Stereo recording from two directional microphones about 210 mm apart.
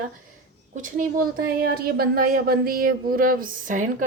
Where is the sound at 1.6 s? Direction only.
45° right (ahead or behind).